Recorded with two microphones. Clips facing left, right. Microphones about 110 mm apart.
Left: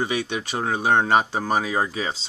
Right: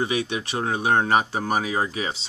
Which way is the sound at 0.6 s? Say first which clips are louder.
Left 1 dB; 25° left (ahead or behind).